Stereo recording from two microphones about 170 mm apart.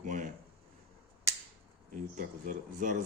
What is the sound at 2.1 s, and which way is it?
Speech, 50° right (ahead or behind).